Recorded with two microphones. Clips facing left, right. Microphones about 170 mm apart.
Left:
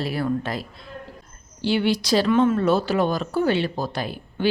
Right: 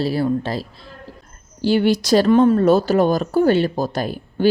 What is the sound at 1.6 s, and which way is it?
A woman's voice, 40° right (ahead or behind).